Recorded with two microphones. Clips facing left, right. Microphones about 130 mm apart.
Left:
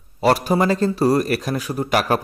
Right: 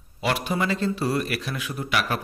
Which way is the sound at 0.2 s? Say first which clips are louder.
Left 8 dB; 40° left (ahead or behind).